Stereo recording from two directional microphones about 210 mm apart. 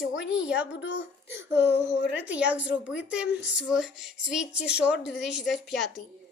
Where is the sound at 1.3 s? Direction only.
10° right (ahead or behind).